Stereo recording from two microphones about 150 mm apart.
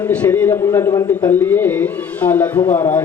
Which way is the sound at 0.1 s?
10° left (ahead or behind).